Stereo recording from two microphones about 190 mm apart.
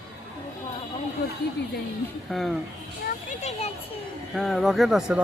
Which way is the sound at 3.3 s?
35° left (ahead or behind).